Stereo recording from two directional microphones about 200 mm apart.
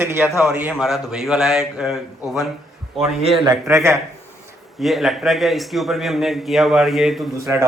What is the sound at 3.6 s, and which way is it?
Speech, 15° right (ahead or behind).